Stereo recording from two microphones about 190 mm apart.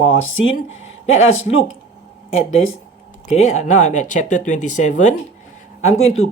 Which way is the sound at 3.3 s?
40° left (ahead or behind).